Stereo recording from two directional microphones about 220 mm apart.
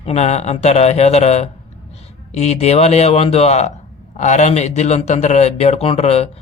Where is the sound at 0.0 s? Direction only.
30° left (ahead or behind).